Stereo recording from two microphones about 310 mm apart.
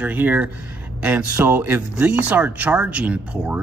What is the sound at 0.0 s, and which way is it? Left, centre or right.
Speech, centre.